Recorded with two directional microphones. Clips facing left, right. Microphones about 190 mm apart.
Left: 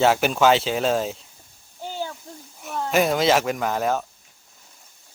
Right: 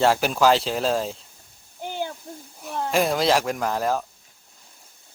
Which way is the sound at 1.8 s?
15° right (ahead or behind).